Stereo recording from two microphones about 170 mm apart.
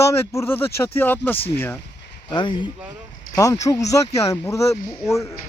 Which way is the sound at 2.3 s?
30° left (ahead or behind).